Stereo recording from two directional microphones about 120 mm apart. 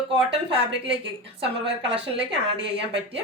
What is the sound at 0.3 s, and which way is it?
A woman's voice, 50° right (ahead or behind).